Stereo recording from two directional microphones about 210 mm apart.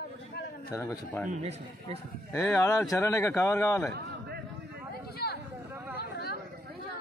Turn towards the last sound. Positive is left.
turn(degrees=50)  # may be behind; listen again after turning